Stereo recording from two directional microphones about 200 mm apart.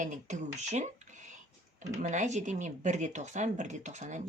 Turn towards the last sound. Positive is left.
turn(degrees=-35)  # may be behind; listen again after turning